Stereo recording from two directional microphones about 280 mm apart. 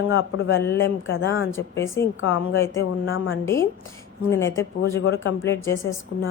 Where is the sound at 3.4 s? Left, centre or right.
Centre.